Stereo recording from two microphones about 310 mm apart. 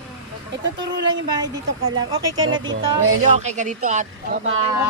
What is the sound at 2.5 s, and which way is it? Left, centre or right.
Music, right.